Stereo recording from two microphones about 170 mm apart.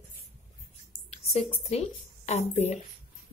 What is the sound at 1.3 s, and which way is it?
Speech, 35° left (ahead or behind).